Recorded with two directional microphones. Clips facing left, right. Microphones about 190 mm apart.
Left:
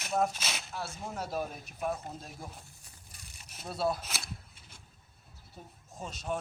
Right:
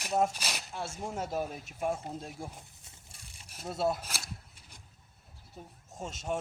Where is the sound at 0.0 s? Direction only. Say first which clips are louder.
Right 1 dB; 15° right (ahead or behind).